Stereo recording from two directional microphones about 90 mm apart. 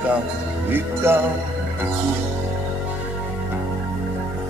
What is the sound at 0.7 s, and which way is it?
Music, 25° right (ahead or behind).